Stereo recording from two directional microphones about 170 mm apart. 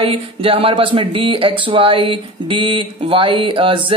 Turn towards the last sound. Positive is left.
turn(degrees=-30)  # may be behind; listen again after turning